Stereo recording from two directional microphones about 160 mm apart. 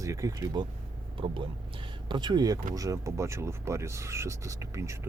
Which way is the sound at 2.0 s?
30° right (ahead or behind).